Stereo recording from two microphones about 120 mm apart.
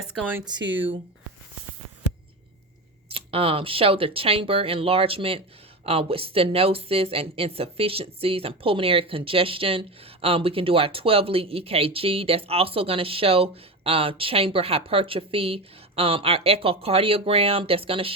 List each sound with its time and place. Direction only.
3.1 s speech: 50° right (ahead or behind)